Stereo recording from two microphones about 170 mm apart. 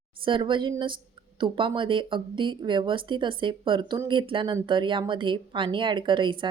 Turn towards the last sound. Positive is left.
turn(degrees=-30)  # may be behind; listen again after turning